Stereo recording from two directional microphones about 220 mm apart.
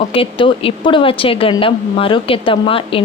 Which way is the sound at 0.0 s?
25° left (ahead or behind).